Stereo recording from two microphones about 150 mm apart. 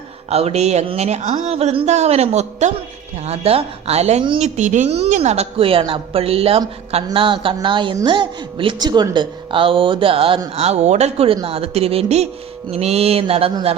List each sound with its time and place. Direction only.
0.3 s a woman's voice: 45° right (ahead or behind)